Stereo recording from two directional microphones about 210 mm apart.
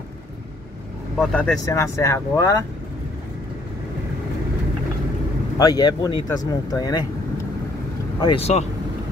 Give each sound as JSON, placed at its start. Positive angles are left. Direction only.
{"t": 1.1, "sound": "speech", "side_deg": 5}
{"t": 5.6, "sound": "speech", "side_deg": 20}